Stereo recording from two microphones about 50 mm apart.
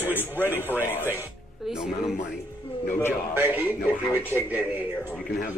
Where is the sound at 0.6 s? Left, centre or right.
Left.